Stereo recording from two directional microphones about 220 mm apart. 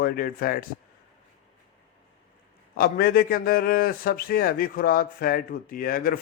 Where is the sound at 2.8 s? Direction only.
45° left (ahead or behind).